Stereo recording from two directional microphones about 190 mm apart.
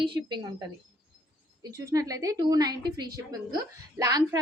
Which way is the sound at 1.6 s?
15° right (ahead or behind).